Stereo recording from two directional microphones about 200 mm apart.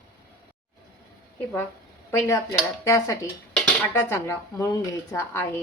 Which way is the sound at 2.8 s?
15° left (ahead or behind).